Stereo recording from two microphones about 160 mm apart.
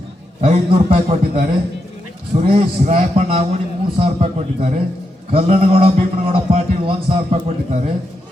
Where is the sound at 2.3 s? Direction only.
55° right (ahead or behind).